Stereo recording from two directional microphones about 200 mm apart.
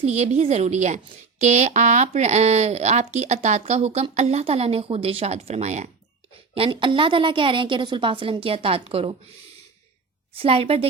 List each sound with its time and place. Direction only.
0.0 s a woman's voice: 30° right (ahead or behind)
10.3 s a woman's voice: 30° right (ahead or behind)